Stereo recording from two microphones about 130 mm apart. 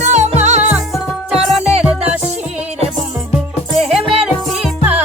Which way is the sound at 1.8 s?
10° right (ahead or behind).